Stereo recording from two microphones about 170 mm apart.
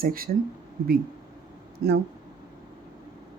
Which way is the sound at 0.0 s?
60° right (ahead or behind).